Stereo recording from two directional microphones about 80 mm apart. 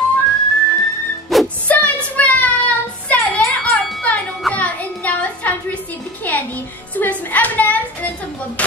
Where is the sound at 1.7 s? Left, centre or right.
Left.